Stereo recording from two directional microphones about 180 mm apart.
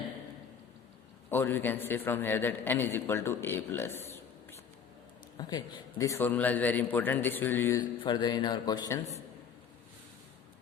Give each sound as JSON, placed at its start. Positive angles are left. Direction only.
{"t": 1.3, "sound": "a man's voice", "side_deg": 10}
{"t": 5.4, "sound": "a man's voice", "side_deg": 25}
{"t": 7.8, "sound": "a man's voice", "side_deg": 25}